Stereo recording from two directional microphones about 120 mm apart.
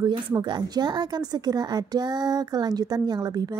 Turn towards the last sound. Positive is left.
turn(degrees=-35)  # may be behind; listen again after turning